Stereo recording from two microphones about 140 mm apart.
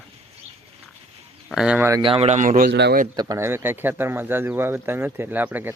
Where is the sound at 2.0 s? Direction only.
40° right (ahead or behind).